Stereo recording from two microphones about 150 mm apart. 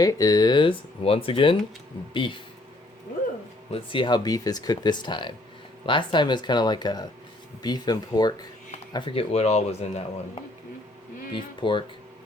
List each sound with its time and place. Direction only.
0.0 s speech: 25° left (ahead or behind)
3.7 s speech: 35° left (ahead or behind)
11.3 s speech: 35° left (ahead or behind)